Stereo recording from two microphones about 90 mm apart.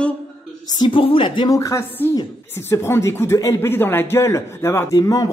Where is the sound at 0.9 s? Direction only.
80° left.